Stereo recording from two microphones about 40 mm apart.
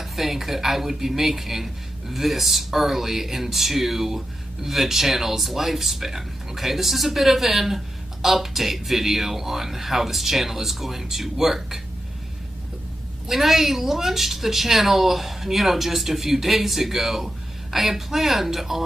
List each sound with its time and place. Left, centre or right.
0.0 s speech: centre
13.3 s speech: centre